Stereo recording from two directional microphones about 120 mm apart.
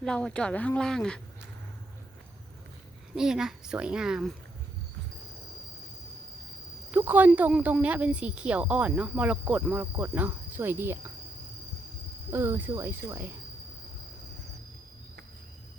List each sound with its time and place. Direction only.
0.0 s speech: 5° left (ahead or behind)
3.2 s speech: 5° right (ahead or behind)
6.9 s a woman's voice: 15° right (ahead or behind)
12.3 s speech: 20° right (ahead or behind)